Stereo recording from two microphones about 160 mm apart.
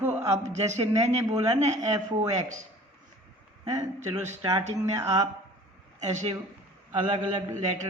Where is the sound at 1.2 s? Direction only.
25° right (ahead or behind).